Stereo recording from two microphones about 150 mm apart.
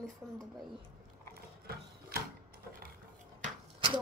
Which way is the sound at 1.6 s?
90° right.